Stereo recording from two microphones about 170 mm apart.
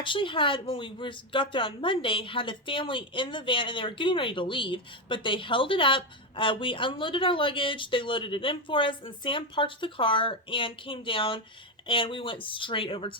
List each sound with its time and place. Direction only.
0.0 s a woman's voice: 30° left (ahead or behind)